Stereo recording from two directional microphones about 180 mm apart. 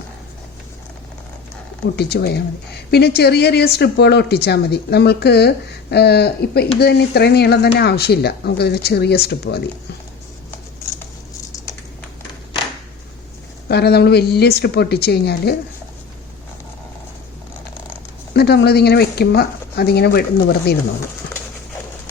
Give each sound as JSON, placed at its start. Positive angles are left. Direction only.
{"t": 2.0, "sound": "speech", "side_deg": 60}
{"t": 13.7, "sound": "speech", "side_deg": 65}
{"t": 18.3, "sound": "speech", "side_deg": 65}